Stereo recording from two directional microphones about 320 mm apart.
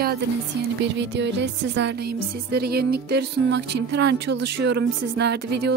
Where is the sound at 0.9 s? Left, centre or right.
Right.